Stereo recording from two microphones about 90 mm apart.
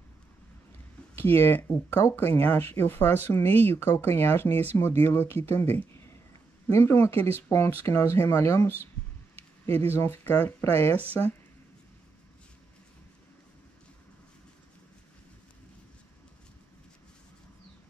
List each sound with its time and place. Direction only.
1.1 s speech: 25° left (ahead or behind)